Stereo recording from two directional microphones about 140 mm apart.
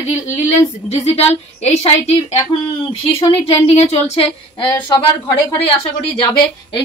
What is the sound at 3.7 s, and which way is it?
Speech, 45° left (ahead or behind).